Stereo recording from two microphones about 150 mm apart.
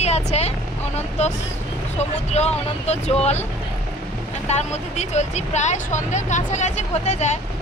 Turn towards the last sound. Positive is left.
turn(degrees=50)  # may be behind; listen again after turning